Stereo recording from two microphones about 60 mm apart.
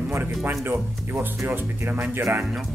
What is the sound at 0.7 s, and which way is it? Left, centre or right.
Speech, right.